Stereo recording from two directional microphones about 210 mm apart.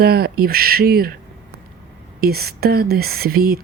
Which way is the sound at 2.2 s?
45° right (ahead or behind).